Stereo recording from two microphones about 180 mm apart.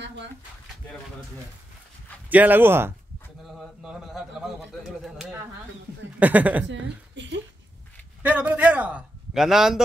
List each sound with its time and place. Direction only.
2.2 s a man's voice: 10° right (ahead or behind)
7.2 s a sound: 90° right
8.2 s a man's voice: 10° right (ahead or behind)